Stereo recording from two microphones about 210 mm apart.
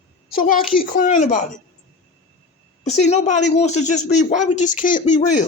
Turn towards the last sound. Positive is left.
turn(degrees=35)  # may be behind; listen again after turning